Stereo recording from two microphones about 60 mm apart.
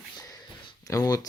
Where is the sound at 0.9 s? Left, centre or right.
Left.